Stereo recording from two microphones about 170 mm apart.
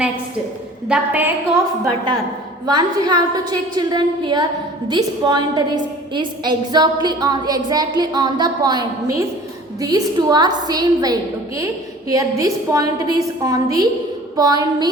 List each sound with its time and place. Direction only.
0.9 s a woman's voice: 10° right (ahead or behind)
2.6 s a woman's voice: 25° right (ahead or behind)